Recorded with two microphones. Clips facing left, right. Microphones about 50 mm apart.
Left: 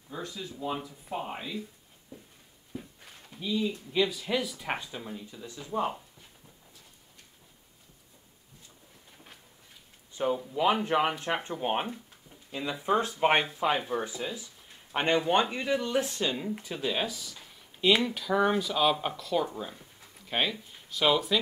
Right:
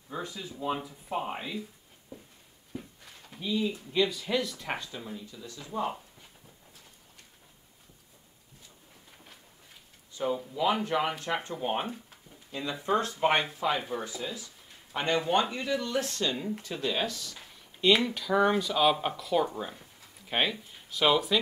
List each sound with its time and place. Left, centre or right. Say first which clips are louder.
0.1 s speech: right 1 dB; centre
2.7 s a sound: even; centre
3.3 s speech: even; centre
5.2 s speech: left 1 dB; left
10.2 s speech: left 2 dB; centre